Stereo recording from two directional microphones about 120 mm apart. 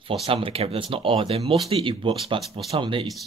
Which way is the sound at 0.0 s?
50° right (ahead or behind).